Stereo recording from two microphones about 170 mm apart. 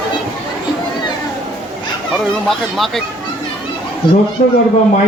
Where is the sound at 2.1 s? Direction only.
Centre (ahead or behind).